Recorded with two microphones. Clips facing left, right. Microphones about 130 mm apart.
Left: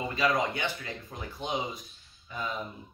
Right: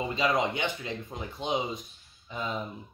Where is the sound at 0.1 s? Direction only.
20° right (ahead or behind).